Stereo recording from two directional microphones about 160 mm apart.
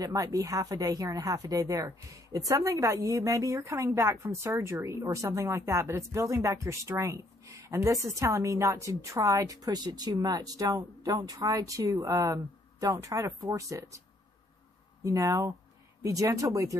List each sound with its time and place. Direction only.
0.0 s speech: 20° right (ahead or behind)
15.0 s speech: 20° right (ahead or behind)